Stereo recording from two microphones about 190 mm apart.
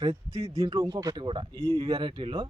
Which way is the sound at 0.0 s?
20° right (ahead or behind).